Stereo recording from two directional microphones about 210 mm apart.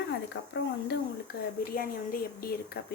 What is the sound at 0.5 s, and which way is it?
Speech, 50° left (ahead or behind).